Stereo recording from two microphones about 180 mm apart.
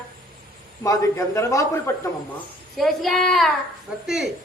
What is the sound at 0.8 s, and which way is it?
A man's voice, 15° left (ahead or behind).